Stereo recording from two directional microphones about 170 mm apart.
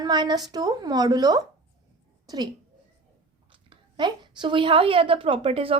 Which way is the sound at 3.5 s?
25° right (ahead or behind).